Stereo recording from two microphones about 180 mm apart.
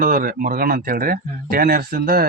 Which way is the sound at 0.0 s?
50° right (ahead or behind).